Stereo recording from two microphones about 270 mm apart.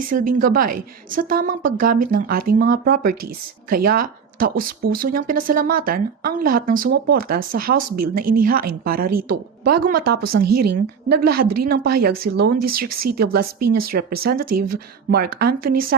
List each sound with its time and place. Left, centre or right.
0.1 s speech: right